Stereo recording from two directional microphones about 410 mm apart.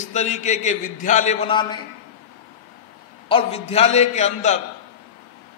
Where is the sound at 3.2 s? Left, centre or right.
Centre.